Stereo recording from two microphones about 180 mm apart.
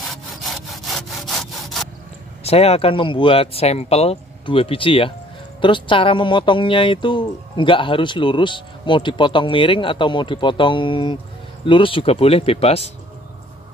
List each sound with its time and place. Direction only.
0.0 s sawing: centre (ahead or behind)
2.4 s speech: 35° left (ahead or behind)